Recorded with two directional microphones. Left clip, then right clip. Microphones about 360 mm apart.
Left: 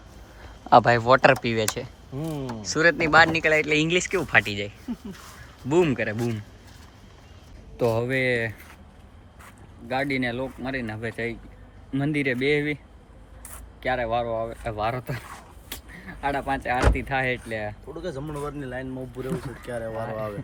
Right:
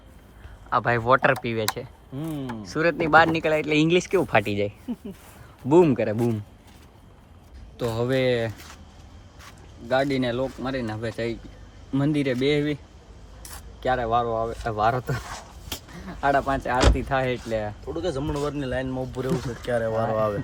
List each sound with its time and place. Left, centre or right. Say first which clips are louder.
0.7 s speech: left 4 dB; centre
7.8 s speech: left 1 dB; centre
9.9 s speech: right 3 dB; centre
13.8 s speech: right 2 dB; centre
16.2 s speech: right 4 dB; centre
18.0 s speech: right 5 dB; right